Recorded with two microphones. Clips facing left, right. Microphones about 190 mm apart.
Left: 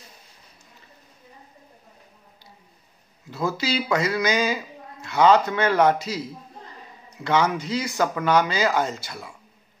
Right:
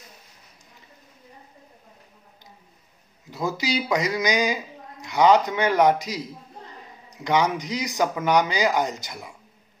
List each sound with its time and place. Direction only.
3.3 s speech: 15° right (ahead or behind)